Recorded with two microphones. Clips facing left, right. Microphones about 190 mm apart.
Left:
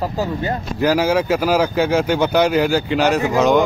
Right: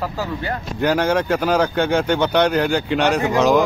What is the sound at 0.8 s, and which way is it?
Speech, 5° left (ahead or behind).